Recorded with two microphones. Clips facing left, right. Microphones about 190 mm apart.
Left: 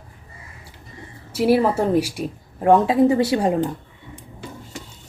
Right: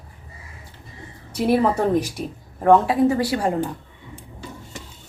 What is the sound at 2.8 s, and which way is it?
Speech, 25° left (ahead or behind).